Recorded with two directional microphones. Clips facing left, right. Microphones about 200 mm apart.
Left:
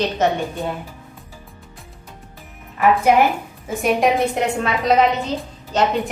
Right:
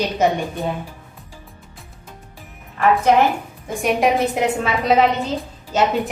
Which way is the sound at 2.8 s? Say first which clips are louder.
Even; 5° left (ahead or behind).